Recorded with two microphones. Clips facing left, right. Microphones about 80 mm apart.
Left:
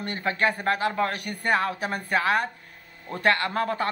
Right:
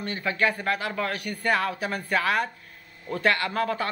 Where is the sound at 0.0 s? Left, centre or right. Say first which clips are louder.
Left 1 dB; left.